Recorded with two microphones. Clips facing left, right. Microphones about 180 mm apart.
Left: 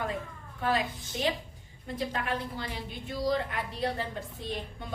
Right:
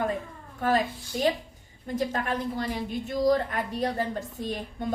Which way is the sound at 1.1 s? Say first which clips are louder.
Right 5 dB; 50° right (ahead or behind).